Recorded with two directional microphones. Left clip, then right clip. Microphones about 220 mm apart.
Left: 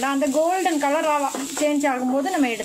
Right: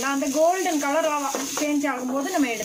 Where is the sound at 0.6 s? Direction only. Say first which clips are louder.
Left 2 dB; 35° left (ahead or behind).